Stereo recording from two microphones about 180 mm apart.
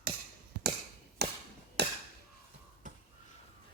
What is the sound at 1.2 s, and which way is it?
Chop, 65° right (ahead or behind).